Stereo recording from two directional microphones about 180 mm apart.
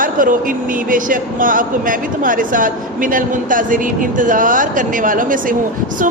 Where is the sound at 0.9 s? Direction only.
50° right (ahead or behind).